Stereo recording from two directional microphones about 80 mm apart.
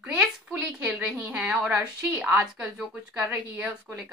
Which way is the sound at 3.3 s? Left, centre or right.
Centre.